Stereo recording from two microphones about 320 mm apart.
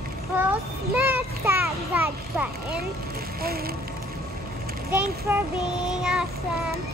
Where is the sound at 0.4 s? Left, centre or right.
Centre.